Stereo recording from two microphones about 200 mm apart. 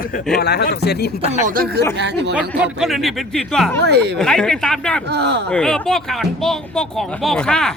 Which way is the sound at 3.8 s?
55° right (ahead or behind).